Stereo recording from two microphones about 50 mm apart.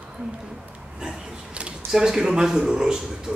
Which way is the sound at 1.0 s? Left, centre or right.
Right.